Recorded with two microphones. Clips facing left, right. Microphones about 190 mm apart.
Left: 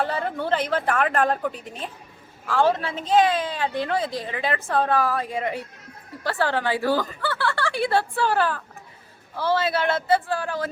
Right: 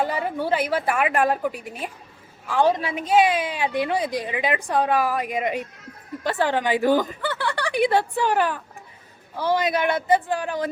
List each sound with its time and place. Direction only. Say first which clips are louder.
0.0 s a woman's voice: right 1 dB; 10° right (ahead or behind)